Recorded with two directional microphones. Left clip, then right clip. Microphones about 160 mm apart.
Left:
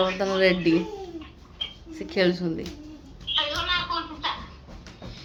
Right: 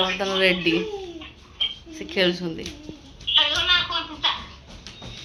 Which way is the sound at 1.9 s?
15° left (ahead or behind).